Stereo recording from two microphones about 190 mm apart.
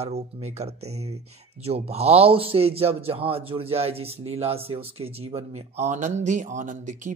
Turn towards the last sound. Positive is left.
turn(degrees=-40)  # may be behind; listen again after turning